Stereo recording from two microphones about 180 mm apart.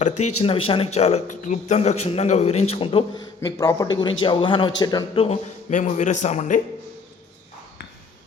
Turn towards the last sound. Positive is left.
turn(degrees=40)  # may be behind; listen again after turning